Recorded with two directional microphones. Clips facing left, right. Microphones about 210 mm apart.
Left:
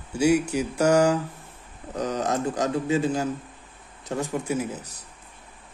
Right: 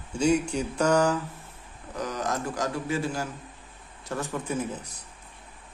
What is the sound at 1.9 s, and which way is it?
A man's voice, 25° left (ahead or behind).